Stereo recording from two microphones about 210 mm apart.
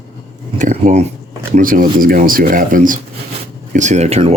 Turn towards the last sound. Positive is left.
turn(degrees=-30)  # may be behind; listen again after turning